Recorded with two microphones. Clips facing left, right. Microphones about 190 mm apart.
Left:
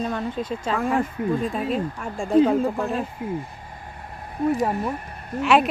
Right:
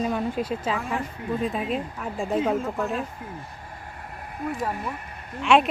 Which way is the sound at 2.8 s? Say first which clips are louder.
Left 2 dB; 30° left (ahead or behind).